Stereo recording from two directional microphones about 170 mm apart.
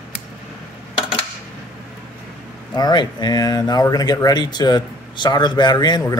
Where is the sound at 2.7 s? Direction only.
25° left (ahead or behind).